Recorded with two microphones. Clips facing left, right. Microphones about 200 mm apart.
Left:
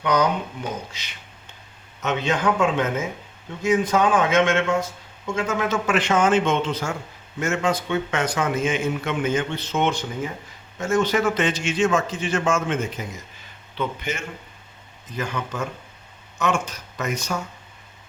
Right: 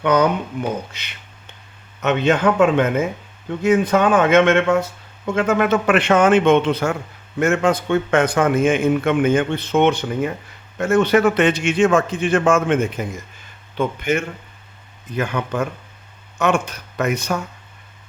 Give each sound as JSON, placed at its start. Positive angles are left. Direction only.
{"t": 0.0, "sound": "speech", "side_deg": -60}
{"t": 2.0, "sound": "speech", "side_deg": -60}